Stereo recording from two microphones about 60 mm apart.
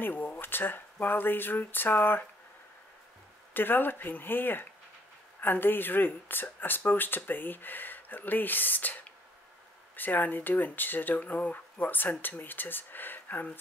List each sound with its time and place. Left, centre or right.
0.0 s speech: left
3.5 s speech: left